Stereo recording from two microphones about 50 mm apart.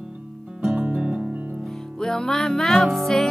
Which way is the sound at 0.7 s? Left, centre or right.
Right.